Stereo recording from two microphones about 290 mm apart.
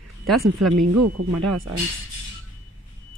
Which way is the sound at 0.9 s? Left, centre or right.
Right.